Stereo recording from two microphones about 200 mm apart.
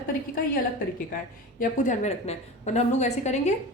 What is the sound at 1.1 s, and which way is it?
A woman's voice, 45° left (ahead or behind).